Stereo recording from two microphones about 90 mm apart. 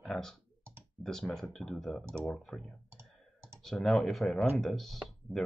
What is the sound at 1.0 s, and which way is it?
Speech, 5° left (ahead or behind).